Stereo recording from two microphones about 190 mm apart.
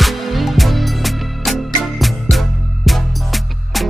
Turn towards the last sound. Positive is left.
turn(degrees=0)  # may be behind; listen again after turning